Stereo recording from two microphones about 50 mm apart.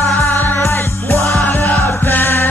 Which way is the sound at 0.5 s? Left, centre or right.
Left.